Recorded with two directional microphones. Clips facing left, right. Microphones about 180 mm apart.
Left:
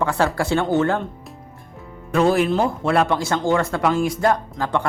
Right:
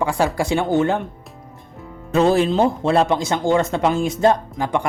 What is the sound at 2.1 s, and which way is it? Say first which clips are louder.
Speech: right 1 dB; 25° right (ahead or behind).